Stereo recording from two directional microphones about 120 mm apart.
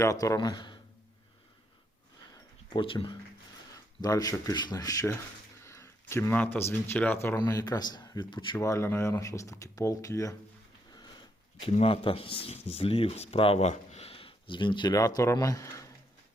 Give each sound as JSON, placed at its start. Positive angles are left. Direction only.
{"t": 0.0, "sound": "speech", "side_deg": 25}
{"t": 2.8, "sound": "speech", "side_deg": 45}
{"t": 3.7, "sound": "speech", "side_deg": 30}
{"t": 8.5, "sound": "speech", "side_deg": 25}
{"t": 10.9, "sound": "sniff", "side_deg": 35}
{"t": 11.9, "sound": "speech", "side_deg": 50}